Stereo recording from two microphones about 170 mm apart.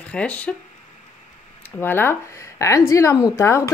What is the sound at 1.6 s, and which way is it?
Speech, 10° left (ahead or behind).